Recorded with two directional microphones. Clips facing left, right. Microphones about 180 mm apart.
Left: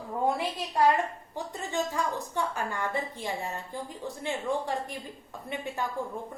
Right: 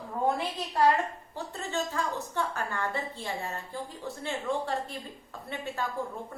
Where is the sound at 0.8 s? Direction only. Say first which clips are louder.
Even; 15° left (ahead or behind).